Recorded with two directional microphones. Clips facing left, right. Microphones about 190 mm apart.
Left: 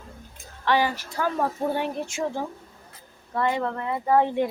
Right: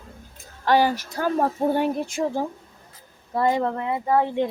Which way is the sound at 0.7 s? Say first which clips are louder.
Right 4 dB; 40° right (ahead or behind).